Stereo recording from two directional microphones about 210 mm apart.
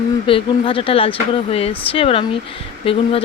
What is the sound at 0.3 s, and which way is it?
Speech, 25° left (ahead or behind).